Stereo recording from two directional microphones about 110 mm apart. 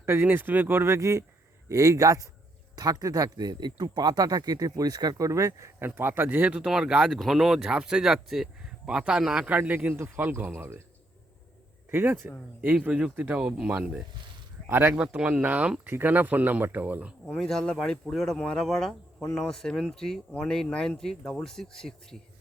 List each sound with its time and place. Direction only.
0.0 s a man's voice: 20° right (ahead or behind)
11.9 s speech: 20° right (ahead or behind)
17.2 s speech: 5° left (ahead or behind)